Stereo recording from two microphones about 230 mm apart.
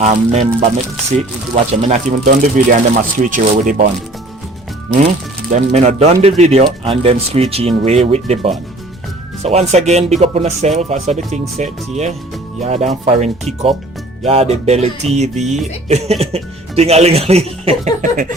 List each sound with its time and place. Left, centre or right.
0.0 s speech: right
5.5 s speech: right